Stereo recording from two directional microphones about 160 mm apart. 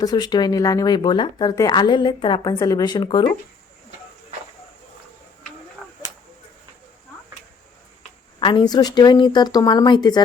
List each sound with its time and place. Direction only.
0.0 s speech: 25° left (ahead or behind)
5.8 s a sound: centre (ahead or behind)
8.4 s speech: 30° left (ahead or behind)